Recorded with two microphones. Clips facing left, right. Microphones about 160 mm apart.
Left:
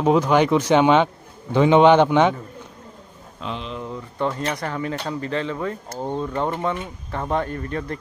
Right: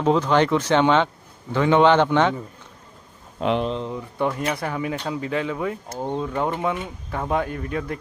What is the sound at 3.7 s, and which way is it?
Speech, 15° right (ahead or behind).